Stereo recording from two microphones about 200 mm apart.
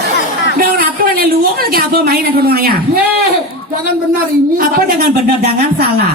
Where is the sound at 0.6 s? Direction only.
45° right (ahead or behind).